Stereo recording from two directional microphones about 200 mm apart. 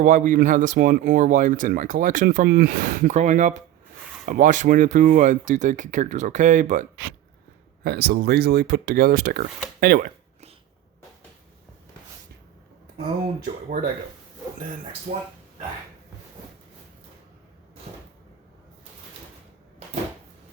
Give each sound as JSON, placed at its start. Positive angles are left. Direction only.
{"t": 0.0, "sound": "speech", "side_deg": -40}
{"t": 7.9, "sound": "speech", "side_deg": -55}
{"t": 13.4, "sound": "speech", "side_deg": -45}